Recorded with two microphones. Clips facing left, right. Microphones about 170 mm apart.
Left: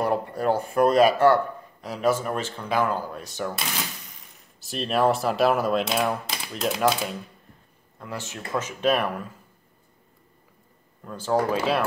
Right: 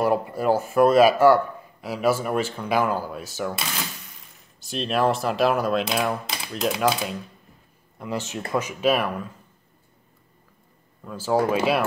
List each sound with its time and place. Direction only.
0.0 s speech: 5° right (ahead or behind)
8.0 s speech: 20° right (ahead or behind)
11.1 s speech: 5° right (ahead or behind)